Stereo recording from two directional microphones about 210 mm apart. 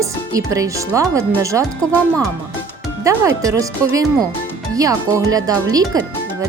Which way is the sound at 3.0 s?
15° right (ahead or behind).